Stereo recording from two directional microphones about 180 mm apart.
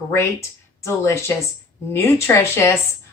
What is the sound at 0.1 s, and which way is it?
A woman's voice, 15° left (ahead or behind).